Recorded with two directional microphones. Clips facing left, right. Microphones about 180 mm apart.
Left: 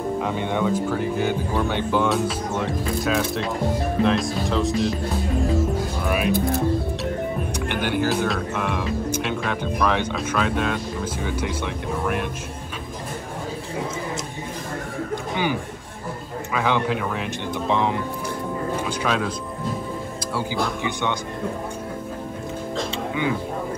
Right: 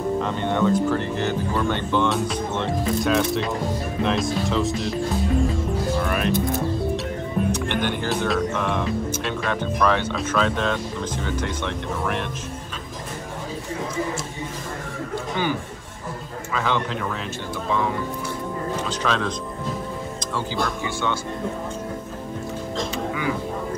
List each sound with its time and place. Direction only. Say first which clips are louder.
0.2 s speech: even; 10° left (ahead or behind)
6.0 s speech: left 1 dB; 5° left (ahead or behind)
7.5 s speech: left 1 dB; 10° left (ahead or behind)
16.5 s speech: left 2 dB; 10° left (ahead or behind)
17.6 s speech: left 2 dB; 20° left (ahead or behind)
18.9 s speech: right 1 dB; 5° left (ahead or behind)
20.8 s speech: left 1 dB; 15° left (ahead or behind)